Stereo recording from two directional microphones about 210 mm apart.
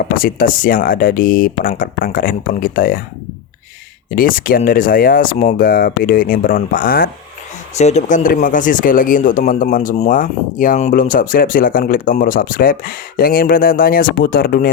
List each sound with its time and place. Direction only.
0.0 s speech: 40° left (ahead or behind)
4.1 s speech: 40° left (ahead or behind)
7.8 s speech: 30° left (ahead or behind)